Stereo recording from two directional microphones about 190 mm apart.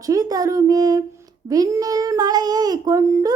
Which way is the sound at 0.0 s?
20° right (ahead or behind).